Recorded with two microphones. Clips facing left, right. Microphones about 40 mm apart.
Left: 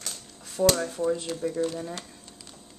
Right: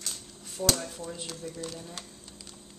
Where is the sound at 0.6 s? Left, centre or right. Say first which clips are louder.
Left 7 dB; left.